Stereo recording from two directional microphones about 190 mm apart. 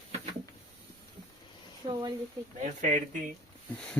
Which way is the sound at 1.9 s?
20° right (ahead or behind).